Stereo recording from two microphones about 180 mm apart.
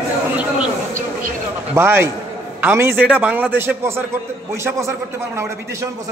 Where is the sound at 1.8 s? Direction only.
15° right (ahead or behind).